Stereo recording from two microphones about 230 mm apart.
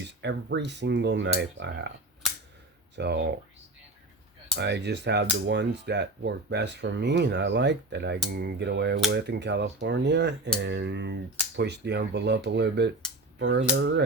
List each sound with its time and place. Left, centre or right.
0.1 s speech: right
2.9 s speech: right
4.5 s speech: right